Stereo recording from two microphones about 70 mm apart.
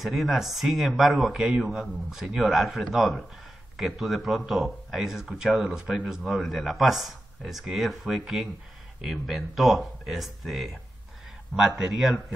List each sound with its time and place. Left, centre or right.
0.0 s speech: centre